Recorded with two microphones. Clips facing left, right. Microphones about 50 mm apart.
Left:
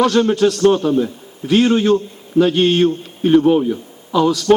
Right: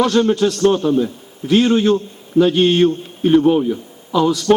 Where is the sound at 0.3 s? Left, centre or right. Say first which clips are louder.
Left 2 dB; left.